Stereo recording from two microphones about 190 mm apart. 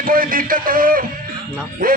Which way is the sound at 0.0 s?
50° right (ahead or behind).